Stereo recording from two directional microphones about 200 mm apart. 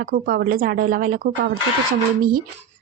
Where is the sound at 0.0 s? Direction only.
45° right (ahead or behind).